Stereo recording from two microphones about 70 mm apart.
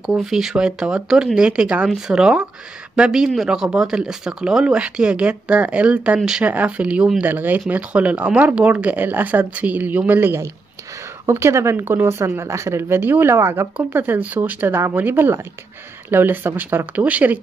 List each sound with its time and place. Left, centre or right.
0.2 s speech: centre
6.4 s speech: right
7.2 s speech: right
11.2 s speech: right